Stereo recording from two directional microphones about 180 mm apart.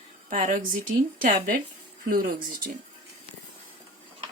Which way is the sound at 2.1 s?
55° right (ahead or behind).